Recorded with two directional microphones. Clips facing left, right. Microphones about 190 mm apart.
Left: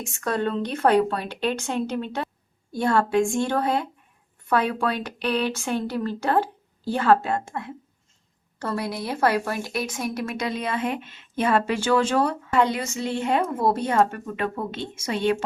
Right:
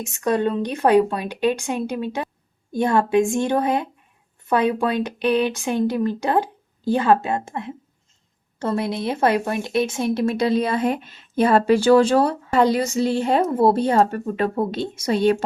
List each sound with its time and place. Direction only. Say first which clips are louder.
0.0 s speech: right 5 dB; 15° right (ahead or behind); by 15.4 s 35° right (ahead or behind)